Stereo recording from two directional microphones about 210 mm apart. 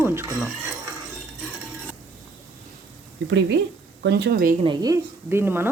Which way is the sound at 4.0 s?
55° right (ahead or behind).